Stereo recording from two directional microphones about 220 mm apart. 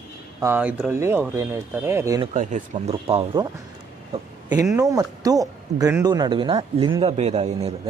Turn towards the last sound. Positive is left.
turn(degrees=-25)  # may be behind; listen again after turning